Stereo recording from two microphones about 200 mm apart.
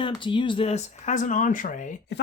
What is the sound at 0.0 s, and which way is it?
Speech, 25° left (ahead or behind).